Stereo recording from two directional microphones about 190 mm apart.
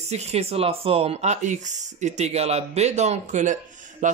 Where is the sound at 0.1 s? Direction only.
35° right (ahead or behind).